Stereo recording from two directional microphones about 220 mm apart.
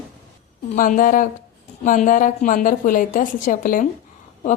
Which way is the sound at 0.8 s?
40° left (ahead or behind).